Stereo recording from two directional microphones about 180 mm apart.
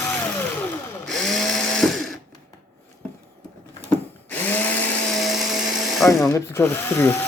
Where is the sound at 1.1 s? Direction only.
Centre (ahead or behind).